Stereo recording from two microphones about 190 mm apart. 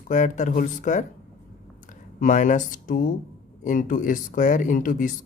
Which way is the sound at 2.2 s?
40° left (ahead or behind).